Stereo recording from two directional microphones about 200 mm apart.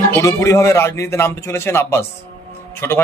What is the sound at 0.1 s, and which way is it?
A man's voice, 10° left (ahead or behind).